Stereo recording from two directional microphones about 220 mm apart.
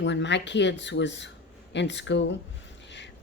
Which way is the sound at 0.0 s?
55° left (ahead or behind).